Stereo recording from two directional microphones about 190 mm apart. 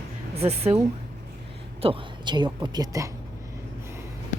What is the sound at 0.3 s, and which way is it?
Speech, 35° right (ahead or behind).